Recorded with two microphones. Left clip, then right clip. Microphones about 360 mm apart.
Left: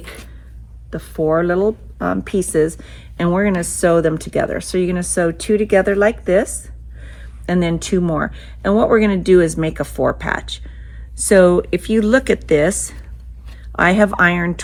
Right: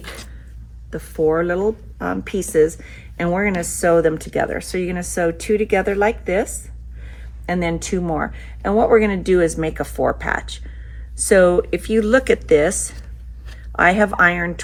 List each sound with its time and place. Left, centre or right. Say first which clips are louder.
0.9 s speech: left 1 dB; centre
7.5 s speech: left 3 dB; left